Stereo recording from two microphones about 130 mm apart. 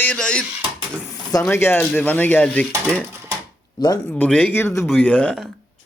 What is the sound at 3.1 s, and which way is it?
Cash register, 25° right (ahead or behind).